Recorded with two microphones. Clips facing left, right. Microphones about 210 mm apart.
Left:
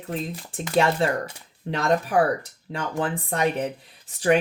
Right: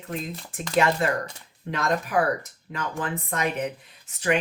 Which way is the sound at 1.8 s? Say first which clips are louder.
Left 3 dB; 30° left (ahead or behind).